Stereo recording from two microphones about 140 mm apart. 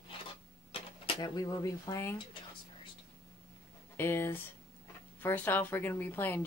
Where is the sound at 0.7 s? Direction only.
40° left (ahead or behind).